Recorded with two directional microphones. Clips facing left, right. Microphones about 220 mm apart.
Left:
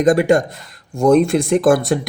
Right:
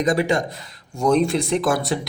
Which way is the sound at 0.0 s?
50° left (ahead or behind).